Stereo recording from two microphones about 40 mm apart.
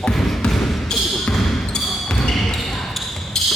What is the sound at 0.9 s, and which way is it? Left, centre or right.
Basketball bounce, centre.